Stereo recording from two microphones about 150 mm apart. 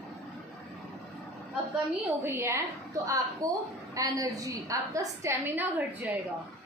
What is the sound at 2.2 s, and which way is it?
A woman's voice, 15° right (ahead or behind).